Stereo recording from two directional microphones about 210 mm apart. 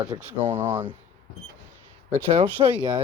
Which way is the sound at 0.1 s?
20° right (ahead or behind).